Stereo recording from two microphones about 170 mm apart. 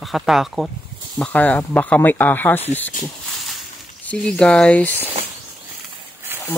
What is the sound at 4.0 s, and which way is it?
Speech, 5° left (ahead or behind).